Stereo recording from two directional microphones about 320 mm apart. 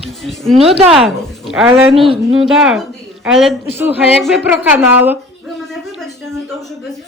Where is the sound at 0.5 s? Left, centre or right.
Centre.